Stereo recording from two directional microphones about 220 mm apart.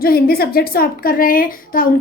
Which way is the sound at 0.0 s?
45° left (ahead or behind).